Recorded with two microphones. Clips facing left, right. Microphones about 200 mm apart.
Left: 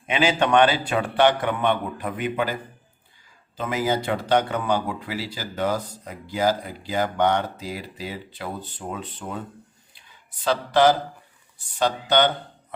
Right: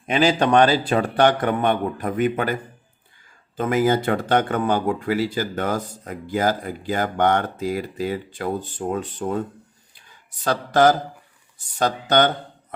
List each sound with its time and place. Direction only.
0.0 s speech: 40° right (ahead or behind)
3.6 s speech: 50° right (ahead or behind)
10.4 s speech: 45° right (ahead or behind)